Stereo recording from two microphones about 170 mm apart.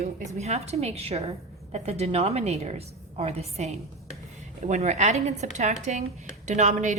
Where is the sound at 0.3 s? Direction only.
40° right (ahead or behind).